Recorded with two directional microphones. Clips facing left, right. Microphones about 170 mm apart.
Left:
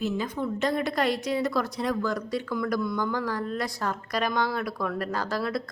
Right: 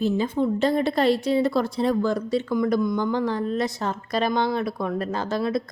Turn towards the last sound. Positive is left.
turn(degrees=-20)  # may be behind; listen again after turning